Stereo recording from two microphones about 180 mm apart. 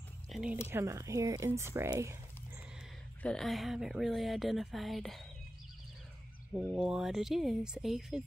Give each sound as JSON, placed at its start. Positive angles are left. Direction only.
{"t": 0.3, "sound": "a sound", "side_deg": -5}
{"t": 0.7, "sound": "speech", "side_deg": -15}
{"t": 3.2, "sound": "speech", "side_deg": 5}
{"t": 6.5, "sound": "speech", "side_deg": -5}